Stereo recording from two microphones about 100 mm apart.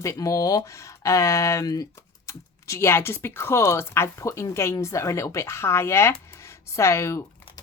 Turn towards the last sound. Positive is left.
turn(degrees=30)  # may be behind; listen again after turning